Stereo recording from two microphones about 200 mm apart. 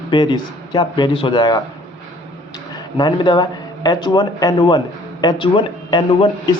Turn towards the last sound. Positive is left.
turn(degrees=25)  # may be behind; listen again after turning